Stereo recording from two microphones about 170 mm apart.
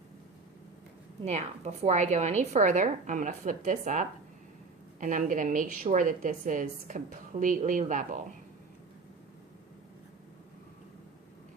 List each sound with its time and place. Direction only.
1.2 s a woman's voice: 40° right (ahead or behind)